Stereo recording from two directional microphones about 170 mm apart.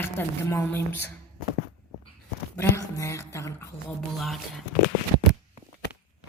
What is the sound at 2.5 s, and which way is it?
Speech, 15° left (ahead or behind).